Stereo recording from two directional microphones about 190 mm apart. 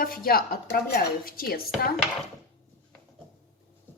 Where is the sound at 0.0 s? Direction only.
50° left (ahead or behind).